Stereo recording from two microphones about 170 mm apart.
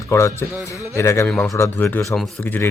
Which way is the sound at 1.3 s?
5° left (ahead or behind).